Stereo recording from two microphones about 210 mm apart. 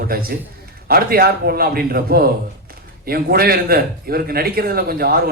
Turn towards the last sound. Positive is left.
turn(degrees=-45)  # may be behind; listen again after turning